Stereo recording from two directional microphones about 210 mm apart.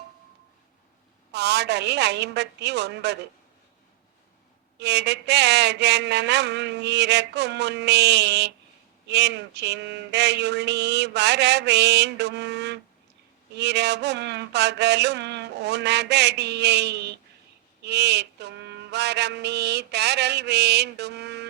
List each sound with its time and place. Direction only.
1.3 s a woman's voice: 55° right (ahead or behind)
4.8 s mantra: 55° right (ahead or behind)